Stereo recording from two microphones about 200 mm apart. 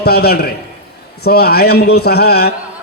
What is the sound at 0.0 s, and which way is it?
A man's voice, 50° left (ahead or behind).